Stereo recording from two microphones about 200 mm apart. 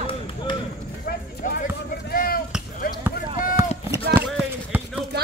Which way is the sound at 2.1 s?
45° left (ahead or behind).